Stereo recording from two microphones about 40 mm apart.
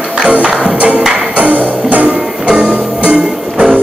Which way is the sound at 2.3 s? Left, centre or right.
Centre.